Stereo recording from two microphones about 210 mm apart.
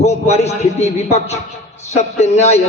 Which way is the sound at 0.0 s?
30° left (ahead or behind).